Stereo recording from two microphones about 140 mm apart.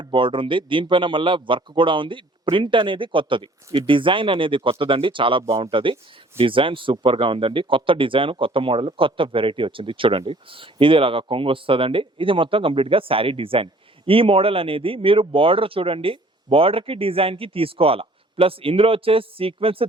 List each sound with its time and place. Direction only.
0.0 s speech: 35° right (ahead or behind)